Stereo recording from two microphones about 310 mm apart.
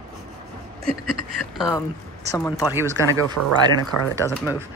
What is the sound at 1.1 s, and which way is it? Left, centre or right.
Speech, centre.